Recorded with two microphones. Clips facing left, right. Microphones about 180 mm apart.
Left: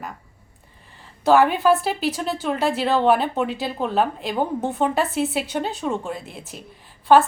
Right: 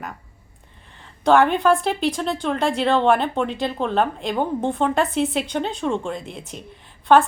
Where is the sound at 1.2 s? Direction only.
5° left (ahead or behind).